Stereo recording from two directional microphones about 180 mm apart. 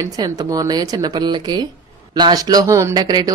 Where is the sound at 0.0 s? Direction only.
20° right (ahead or behind).